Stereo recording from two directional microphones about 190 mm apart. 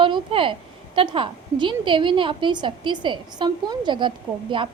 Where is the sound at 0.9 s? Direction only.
25° right (ahead or behind).